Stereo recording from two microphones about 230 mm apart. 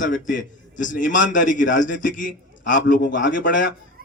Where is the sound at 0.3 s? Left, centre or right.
Left.